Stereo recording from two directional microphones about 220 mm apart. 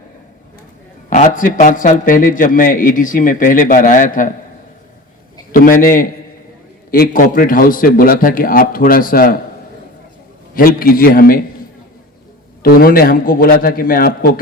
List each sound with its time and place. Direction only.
1.1 s a man's voice: 35° left (ahead or behind)
5.5 s a man's voice: 40° left (ahead or behind)
10.5 s a man's voice: 40° left (ahead or behind)
12.6 s a man's voice: 40° left (ahead or behind)